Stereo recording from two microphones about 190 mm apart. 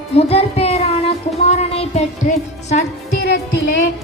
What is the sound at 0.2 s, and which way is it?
Child singing, 30° left (ahead or behind).